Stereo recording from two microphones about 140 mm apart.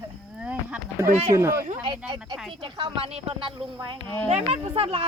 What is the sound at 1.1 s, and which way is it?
Speech, 50° right (ahead or behind).